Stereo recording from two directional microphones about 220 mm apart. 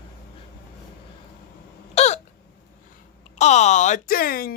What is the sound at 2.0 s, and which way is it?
Hiccup, 30° left (ahead or behind).